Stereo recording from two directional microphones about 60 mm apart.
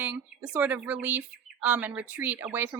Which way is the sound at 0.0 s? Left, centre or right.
Right.